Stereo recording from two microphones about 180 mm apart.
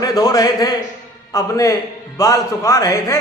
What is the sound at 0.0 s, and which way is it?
A man's voice, 20° left (ahead or behind).